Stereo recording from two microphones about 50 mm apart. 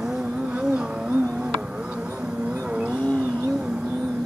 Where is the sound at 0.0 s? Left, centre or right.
Centre.